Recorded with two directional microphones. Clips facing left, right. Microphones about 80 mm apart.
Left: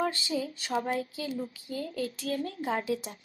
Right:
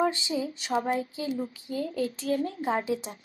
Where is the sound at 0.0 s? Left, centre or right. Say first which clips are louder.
Right 3 dB; centre.